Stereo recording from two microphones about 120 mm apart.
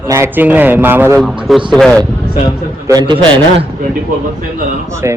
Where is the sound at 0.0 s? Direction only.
25° right (ahead or behind).